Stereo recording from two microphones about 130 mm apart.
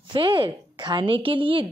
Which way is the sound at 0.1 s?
40° right (ahead or behind).